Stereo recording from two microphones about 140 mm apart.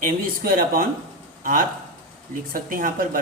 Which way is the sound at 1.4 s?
85° right.